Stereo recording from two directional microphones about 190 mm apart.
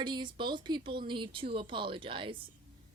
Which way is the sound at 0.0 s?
25° right (ahead or behind).